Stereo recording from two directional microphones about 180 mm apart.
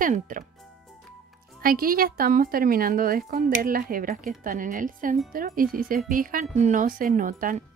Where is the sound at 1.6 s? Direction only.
55° right (ahead or behind).